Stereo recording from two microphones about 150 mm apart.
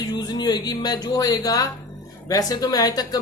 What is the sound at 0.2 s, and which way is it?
A woman's voice, 25° left (ahead or behind).